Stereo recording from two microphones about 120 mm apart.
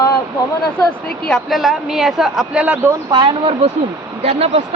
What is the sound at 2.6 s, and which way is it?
Speech, 20° right (ahead or behind).